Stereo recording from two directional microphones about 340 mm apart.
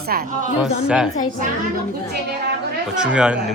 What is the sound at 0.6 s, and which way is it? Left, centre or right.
Speech, centre.